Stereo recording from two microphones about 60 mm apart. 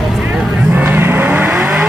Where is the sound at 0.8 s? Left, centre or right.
Right.